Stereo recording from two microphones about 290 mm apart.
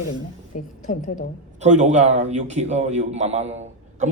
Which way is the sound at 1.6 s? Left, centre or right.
Right.